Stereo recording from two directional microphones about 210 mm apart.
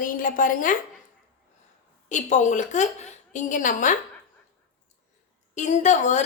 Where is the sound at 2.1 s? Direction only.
35° left (ahead or behind).